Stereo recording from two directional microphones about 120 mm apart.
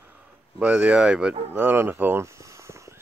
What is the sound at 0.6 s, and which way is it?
Speech, 10° right (ahead or behind).